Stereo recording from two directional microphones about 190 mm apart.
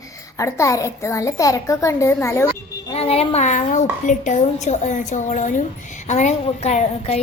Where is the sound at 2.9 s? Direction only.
30° left (ahead or behind).